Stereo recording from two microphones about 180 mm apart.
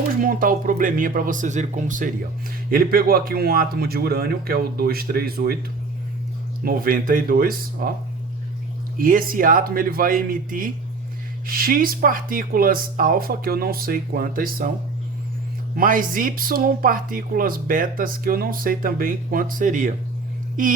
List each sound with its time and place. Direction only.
0.2 s speech: 50° right (ahead or behind)
6.7 s speech: 50° right (ahead or behind)
9.0 s speech: 50° right (ahead or behind)
15.7 s speech: 50° right (ahead or behind)